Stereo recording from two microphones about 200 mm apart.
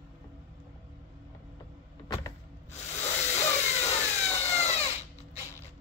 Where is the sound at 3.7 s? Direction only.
35° left (ahead or behind).